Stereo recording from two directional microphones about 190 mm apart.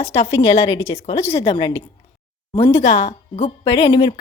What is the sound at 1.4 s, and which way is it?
Speech, 25° left (ahead or behind).